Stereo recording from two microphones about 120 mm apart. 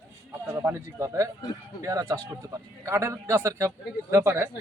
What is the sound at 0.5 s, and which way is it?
A man's voice, 20° right (ahead or behind).